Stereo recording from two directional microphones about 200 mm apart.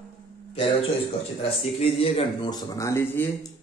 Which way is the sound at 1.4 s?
30° left (ahead or behind).